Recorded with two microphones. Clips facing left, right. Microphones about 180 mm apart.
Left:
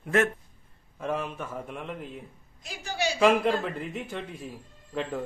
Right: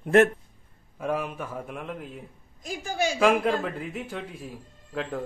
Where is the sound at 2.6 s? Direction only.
45° right (ahead or behind).